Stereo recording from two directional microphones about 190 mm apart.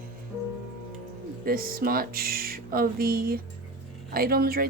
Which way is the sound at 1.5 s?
50° right (ahead or behind).